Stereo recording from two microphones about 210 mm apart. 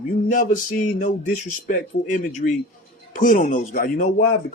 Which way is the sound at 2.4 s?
45° left (ahead or behind).